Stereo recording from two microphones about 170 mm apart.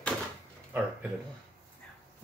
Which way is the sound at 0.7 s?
10° right (ahead or behind).